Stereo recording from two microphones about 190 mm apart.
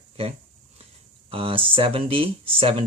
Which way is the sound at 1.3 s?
30° right (ahead or behind).